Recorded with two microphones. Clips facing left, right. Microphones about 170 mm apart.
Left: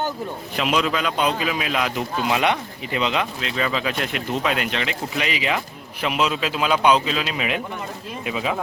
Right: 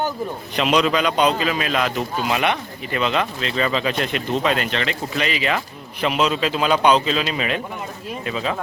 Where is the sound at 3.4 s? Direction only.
5° left (ahead or behind).